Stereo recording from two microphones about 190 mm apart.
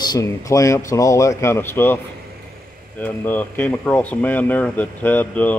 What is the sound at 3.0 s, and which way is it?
Speech, 10° left (ahead or behind).